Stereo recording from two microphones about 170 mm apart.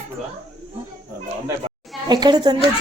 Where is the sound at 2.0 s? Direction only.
25° right (ahead or behind).